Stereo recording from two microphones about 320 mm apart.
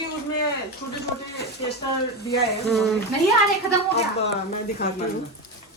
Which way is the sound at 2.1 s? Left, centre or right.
Left.